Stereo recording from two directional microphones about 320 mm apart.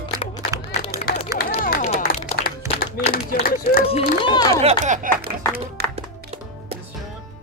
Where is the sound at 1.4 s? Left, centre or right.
Left.